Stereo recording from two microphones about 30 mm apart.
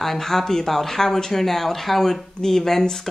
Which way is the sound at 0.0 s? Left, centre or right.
Centre.